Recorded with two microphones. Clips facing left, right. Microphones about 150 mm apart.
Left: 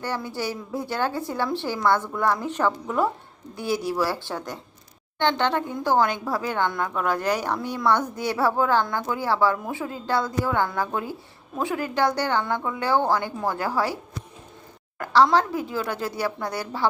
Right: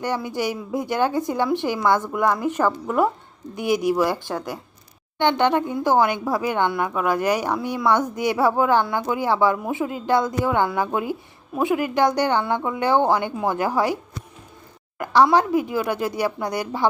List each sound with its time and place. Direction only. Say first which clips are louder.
0.0 s a woman's voice: right 4 dB; 15° right (ahead or behind)